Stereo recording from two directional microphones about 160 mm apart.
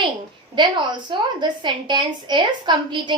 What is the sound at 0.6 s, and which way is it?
A woman's voice, 30° right (ahead or behind).